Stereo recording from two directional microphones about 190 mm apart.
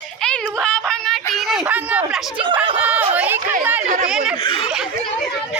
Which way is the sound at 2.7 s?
10° right (ahead or behind).